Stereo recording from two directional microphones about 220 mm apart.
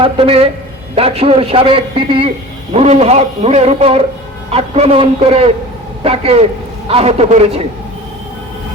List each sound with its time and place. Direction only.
0.0 s a man's voice: 25° right (ahead or behind)